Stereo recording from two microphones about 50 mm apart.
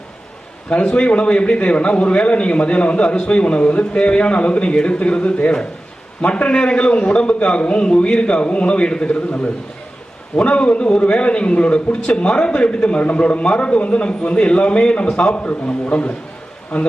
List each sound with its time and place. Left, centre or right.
0.7 s a man's voice: left
16.7 s a man's voice: centre